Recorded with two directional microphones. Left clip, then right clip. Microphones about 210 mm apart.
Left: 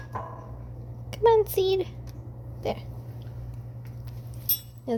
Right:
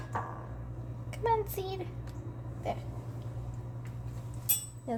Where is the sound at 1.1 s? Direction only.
40° left (ahead or behind).